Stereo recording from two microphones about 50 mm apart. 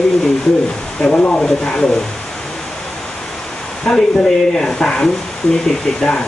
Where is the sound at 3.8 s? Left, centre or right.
Centre.